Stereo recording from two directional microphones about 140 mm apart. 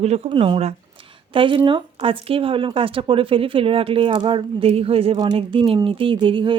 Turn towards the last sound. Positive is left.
turn(degrees=-35)  # may be behind; listen again after turning